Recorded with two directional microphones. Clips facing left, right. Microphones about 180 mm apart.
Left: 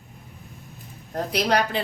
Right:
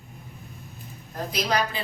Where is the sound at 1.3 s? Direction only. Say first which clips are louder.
Left 3 dB; 65° left (ahead or behind).